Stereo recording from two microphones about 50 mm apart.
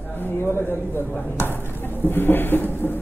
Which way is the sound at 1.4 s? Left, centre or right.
Left.